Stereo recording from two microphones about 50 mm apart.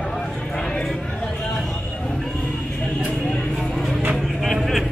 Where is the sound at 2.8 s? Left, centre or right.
Left.